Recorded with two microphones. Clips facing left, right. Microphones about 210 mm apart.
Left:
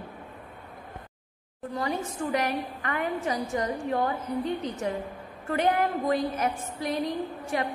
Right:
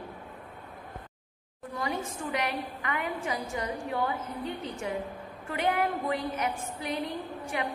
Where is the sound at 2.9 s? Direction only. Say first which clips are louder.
Left 4 dB; 40° left (ahead or behind).